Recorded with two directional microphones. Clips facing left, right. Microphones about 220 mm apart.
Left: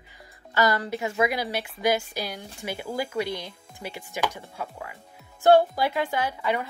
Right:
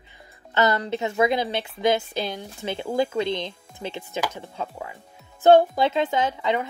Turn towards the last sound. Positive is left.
turn(degrees=-20)  # may be behind; listen again after turning